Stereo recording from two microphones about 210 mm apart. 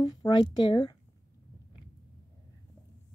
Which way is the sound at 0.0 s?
20° left (ahead or behind).